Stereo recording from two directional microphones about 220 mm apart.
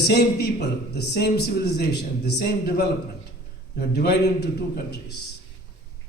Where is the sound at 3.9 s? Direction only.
50° left (ahead or behind).